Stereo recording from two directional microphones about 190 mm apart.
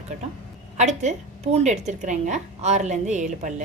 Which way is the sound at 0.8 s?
35° right (ahead or behind).